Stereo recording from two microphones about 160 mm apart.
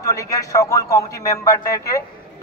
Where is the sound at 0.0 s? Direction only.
20° left (ahead or behind).